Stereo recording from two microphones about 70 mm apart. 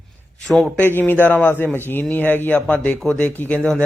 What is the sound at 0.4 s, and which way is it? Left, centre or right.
Speech, centre.